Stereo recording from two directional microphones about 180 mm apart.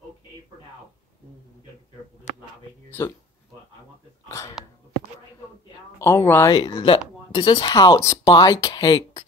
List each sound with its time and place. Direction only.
4.3 s hiccup: 15° left (ahead or behind)
5.9 s speech: 15° left (ahead or behind)
6.5 s speech: 30° left (ahead or behind)